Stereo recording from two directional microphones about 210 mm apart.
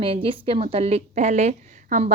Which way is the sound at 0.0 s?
25° right (ahead or behind).